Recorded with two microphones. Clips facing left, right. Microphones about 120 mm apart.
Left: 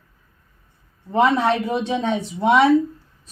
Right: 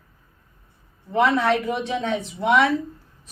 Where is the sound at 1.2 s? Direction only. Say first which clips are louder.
Left 2 dB; 25° left (ahead or behind).